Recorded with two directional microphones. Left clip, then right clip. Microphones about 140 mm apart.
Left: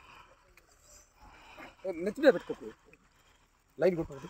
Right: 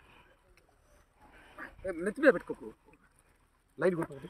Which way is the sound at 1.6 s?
15° left (ahead or behind).